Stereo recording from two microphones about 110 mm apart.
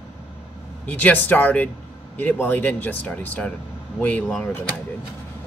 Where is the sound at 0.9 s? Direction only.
15° left (ahead or behind).